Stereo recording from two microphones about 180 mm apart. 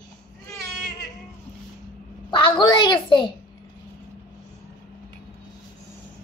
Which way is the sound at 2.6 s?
25° left (ahead or behind).